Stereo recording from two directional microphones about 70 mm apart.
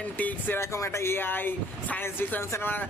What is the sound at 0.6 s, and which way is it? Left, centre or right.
Speech, left.